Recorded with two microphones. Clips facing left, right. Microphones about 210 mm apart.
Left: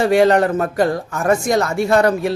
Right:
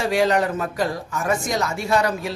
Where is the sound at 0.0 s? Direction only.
55° left (ahead or behind).